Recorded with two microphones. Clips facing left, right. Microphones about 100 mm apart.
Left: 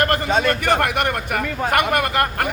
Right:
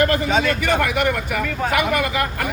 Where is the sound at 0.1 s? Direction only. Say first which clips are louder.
Even; 60° left (ahead or behind).